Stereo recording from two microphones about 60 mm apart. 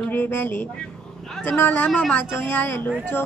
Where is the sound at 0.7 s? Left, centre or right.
Centre.